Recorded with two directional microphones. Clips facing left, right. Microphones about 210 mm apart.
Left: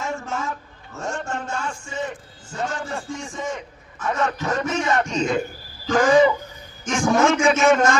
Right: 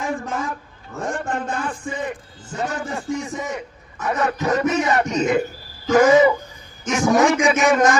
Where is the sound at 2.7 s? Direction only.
15° right (ahead or behind).